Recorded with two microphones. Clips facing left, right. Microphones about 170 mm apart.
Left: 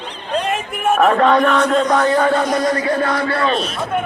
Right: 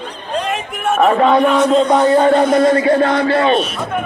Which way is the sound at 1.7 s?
25° right (ahead or behind).